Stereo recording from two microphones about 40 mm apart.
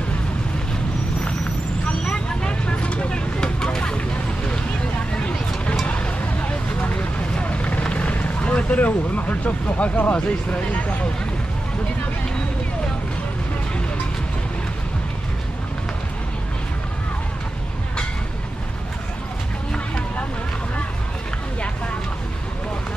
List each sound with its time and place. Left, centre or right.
1.9 s vehicle: left
5.9 s vehicle: left
8.6 s speech: left